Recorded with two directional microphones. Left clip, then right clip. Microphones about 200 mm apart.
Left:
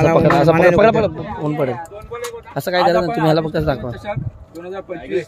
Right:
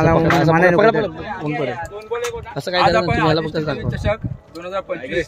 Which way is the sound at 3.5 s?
35° left (ahead or behind).